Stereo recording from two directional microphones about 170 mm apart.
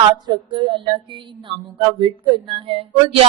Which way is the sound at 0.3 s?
25° right (ahead or behind).